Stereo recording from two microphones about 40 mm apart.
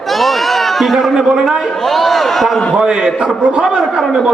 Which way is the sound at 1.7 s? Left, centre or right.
Centre.